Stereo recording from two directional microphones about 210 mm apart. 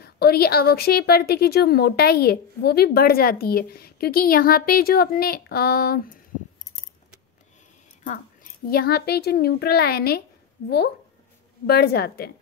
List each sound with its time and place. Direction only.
0.0 s a woman's voice: 50° left (ahead or behind)
8.6 s a woman's voice: 45° left (ahead or behind)
11.6 s a woman's voice: 50° left (ahead or behind)